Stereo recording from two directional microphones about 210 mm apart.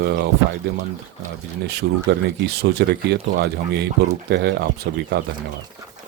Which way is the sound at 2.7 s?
50° right (ahead or behind).